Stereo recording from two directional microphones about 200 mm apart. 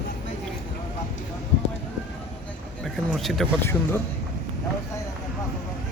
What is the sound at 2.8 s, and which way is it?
Speech, centre (ahead or behind).